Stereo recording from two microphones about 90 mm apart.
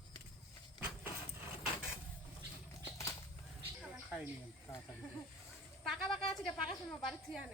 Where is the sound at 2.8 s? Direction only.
35° left (ahead or behind).